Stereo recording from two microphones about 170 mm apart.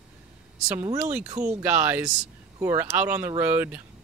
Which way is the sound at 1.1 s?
20° right (ahead or behind).